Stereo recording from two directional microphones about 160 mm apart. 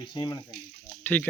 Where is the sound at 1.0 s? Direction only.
10° left (ahead or behind).